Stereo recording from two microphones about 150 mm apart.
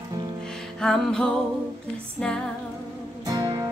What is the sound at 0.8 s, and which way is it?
Music, 5° left (ahead or behind).